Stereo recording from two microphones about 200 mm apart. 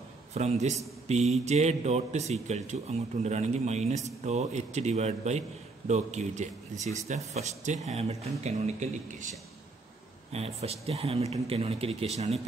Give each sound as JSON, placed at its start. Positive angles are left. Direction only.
{"t": 0.3, "sound": "speech", "side_deg": -35}
{"t": 10.3, "sound": "speech", "side_deg": -30}